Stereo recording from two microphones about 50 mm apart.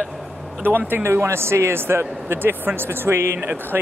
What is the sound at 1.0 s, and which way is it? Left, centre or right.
Speech, right.